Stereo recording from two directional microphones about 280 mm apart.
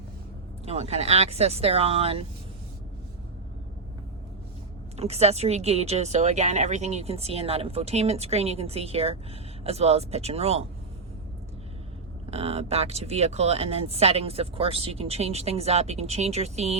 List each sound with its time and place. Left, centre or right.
0.6 s speech: right
4.9 s speech: right
12.3 s speech: right